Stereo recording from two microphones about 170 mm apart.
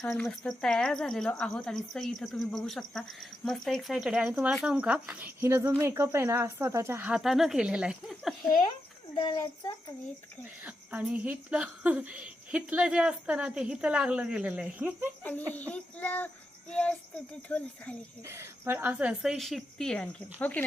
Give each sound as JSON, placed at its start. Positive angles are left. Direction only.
{"t": 0.0, "sound": "speech", "side_deg": 5}
{"t": 9.1, "sound": "a child's voice", "side_deg": 20}
{"t": 10.6, "sound": "speech", "side_deg": -10}
{"t": 15.2, "sound": "speech", "side_deg": 10}
{"t": 15.5, "sound": "child singing", "side_deg": 10}
{"t": 17.5, "sound": "speech", "side_deg": 10}
{"t": 18.3, "sound": "speech", "side_deg": -15}